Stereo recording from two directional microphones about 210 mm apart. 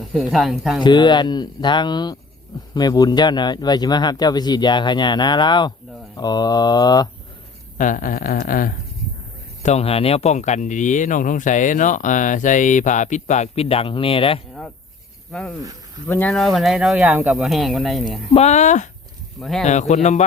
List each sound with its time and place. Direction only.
0.1 s speech: centre (ahead or behind)
0.8 s speech: 20° left (ahead or behind)
7.8 s speech: 40° left (ahead or behind)
9.6 s speech: 30° left (ahead or behind)
15.3 s speech: 5° left (ahead or behind)
18.3 s speech: 35° left (ahead or behind)
19.4 s speech: centre (ahead or behind)
19.6 s speech: 35° left (ahead or behind)